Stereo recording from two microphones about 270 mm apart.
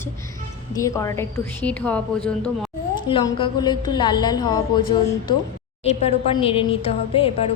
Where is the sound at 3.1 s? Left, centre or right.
Centre.